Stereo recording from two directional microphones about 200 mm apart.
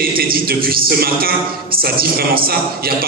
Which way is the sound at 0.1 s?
50° right (ahead or behind).